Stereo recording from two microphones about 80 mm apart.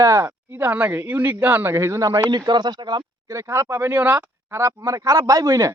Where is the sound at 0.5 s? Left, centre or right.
Right.